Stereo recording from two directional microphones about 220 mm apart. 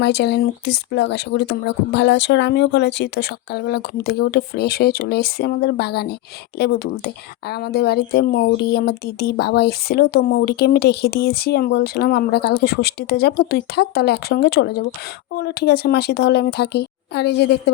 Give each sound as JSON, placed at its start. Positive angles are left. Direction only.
{"t": 0.0, "sound": "speech", "side_deg": 50}